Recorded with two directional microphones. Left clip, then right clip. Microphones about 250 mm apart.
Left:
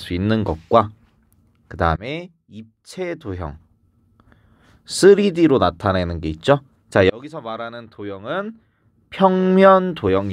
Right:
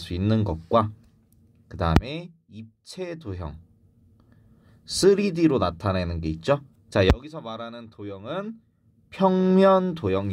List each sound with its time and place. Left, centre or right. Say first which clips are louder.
0.1 s speech: left 6 dB; left
4.8 s speech: left 7 dB; left